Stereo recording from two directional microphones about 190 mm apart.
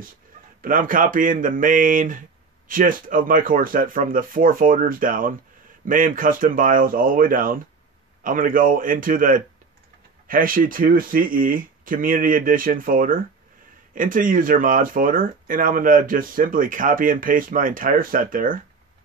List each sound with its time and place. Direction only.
0.6 s speech: 45° right (ahead or behind)